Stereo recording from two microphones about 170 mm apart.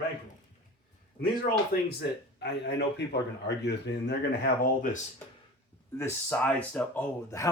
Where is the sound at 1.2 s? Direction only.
60° left (ahead or behind); by 3.9 s 90° left.